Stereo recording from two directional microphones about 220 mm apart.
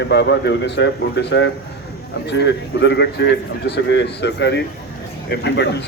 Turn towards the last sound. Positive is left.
turn(degrees=50)  # may be behind; listen again after turning